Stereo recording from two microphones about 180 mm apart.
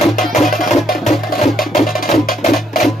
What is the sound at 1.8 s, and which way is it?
Music, centre (ahead or behind).